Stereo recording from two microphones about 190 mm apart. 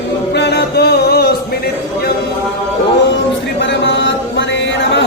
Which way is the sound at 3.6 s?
70° left (ahead or behind).